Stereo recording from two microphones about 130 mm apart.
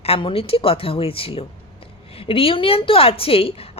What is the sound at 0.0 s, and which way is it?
A woman's voice, 45° left (ahead or behind).